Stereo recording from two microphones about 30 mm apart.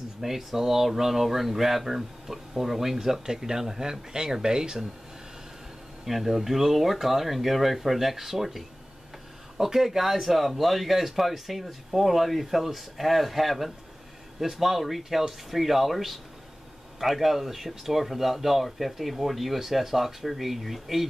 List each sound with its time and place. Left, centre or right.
0.2 s speech: centre
6.0 s speech: centre
9.7 s speech: centre